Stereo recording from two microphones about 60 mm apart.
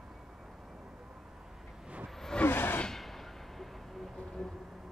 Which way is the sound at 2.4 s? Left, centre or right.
Left.